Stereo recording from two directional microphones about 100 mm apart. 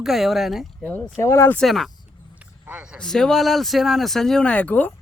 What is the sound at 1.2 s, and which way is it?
Speech, 30° left (ahead or behind).